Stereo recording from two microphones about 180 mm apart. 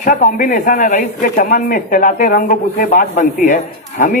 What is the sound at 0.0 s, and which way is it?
Speech, 45° left (ahead or behind).